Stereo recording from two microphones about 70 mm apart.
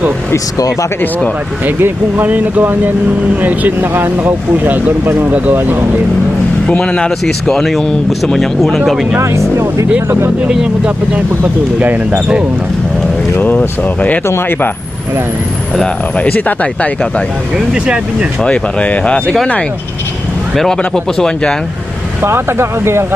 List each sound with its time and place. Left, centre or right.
1.6 s speech: right
6.7 s speech: centre
10.1 s speech: right
10.5 s speech: centre
11.1 s speech: right
13.3 s speech: left
14.3 s speech: left
16.1 s speech: centre
17.7 s speech: centre
18.4 s speech: centre
20.6 s speech: centre
22.2 s speech: right